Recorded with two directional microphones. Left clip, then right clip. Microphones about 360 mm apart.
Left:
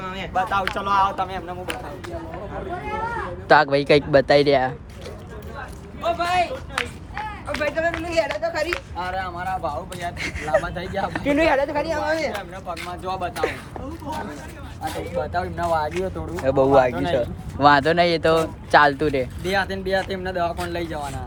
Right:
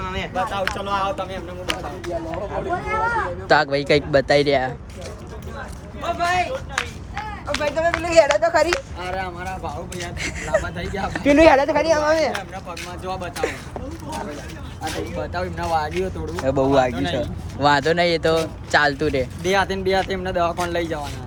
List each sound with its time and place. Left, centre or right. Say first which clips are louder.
0.0 s a sound: right 3 dB; centre
0.8 s speech: left 3 dB; centre
3.5 s speech: left 2 dB; centre
6.1 s speech: right 3 dB; centre
7.5 s speech: right 2 dB; centre
9.0 s speech: left 1 dB; centre
11.2 s speech: right 6 dB; right
12.4 s speech: even; centre
14.8 s speech: left 1 dB; centre